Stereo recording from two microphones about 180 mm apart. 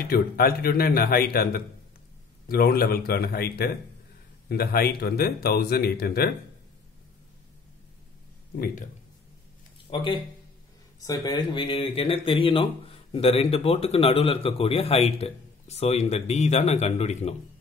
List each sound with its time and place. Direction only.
0.1 s speech: 55° left (ahead or behind)
9.8 s speech: 25° left (ahead or behind)